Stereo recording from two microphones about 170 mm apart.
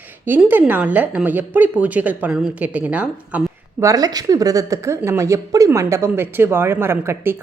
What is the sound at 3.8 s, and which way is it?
Speech, 20° right (ahead or behind).